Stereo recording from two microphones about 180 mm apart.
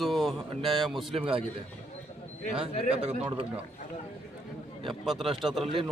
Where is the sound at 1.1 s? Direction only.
30° right (ahead or behind).